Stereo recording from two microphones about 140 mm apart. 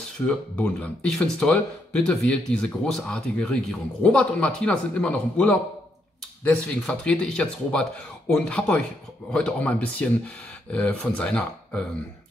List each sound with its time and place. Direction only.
0.3 s speech: 10° left (ahead or behind)